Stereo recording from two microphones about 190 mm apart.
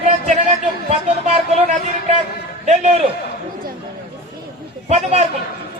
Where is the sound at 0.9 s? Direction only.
35° right (ahead or behind).